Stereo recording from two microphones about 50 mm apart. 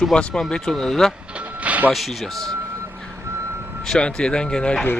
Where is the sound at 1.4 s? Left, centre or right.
Right.